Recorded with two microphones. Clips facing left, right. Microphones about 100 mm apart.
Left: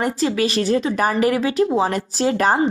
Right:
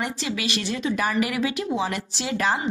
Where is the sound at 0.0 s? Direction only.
40° left (ahead or behind).